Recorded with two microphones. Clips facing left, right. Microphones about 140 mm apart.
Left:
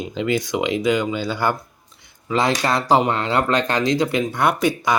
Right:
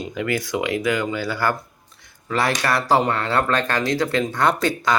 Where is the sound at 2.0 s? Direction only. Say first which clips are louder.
Left 2 dB; 15° left (ahead or behind).